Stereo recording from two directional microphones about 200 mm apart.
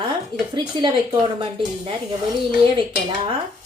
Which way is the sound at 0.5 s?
25° right (ahead or behind).